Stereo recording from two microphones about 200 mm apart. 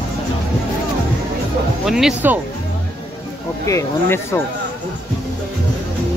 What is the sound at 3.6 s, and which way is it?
Speech, 15° left (ahead or behind).